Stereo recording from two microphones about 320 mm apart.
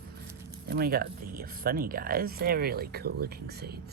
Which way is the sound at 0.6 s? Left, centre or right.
Right.